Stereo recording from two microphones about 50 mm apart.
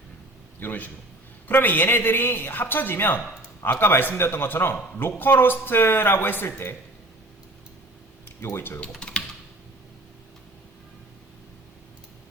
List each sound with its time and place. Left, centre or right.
0.6 s a man's voice: left
8.4 s a man's voice: left
9.0 s typing: centre